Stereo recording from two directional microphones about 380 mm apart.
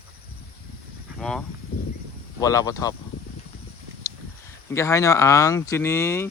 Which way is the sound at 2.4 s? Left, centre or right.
Centre.